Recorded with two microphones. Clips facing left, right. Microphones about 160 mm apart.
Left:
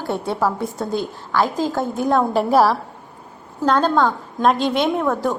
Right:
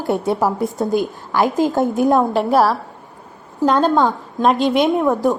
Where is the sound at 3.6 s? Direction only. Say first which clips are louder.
Right 2 dB; 15° right (ahead or behind).